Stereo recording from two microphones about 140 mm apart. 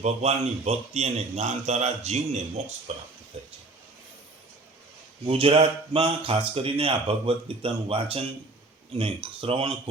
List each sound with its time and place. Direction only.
0.0 s a man's voice: 50° right (ahead or behind)
3.3 s a sound: 50° right (ahead or behind)
5.2 s speech: 40° right (ahead or behind)